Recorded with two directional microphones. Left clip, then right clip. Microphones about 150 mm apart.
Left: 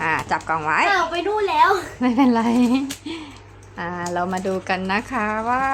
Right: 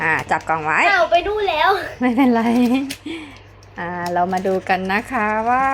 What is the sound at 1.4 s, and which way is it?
Speech, 45° left (ahead or behind).